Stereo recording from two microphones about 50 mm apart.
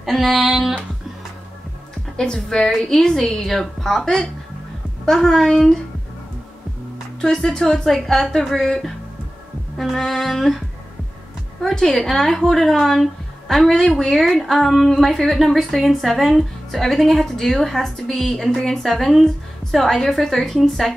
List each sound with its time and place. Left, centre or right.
0.0 s a woman's voice: centre
2.1 s speech: centre
7.2 s a woman's voice: centre
11.6 s a woman's voice: centre